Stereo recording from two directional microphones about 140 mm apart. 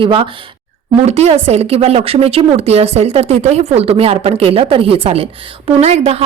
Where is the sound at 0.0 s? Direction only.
35° right (ahead or behind).